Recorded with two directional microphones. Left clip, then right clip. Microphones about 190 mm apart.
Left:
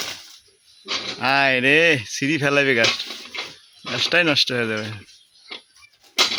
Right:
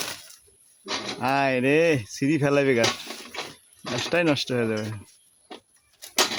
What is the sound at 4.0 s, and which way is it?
Speech, 10° right (ahead or behind).